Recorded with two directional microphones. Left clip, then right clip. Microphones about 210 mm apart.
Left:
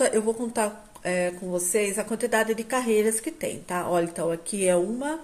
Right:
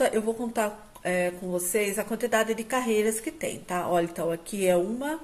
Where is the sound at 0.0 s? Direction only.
20° left (ahead or behind).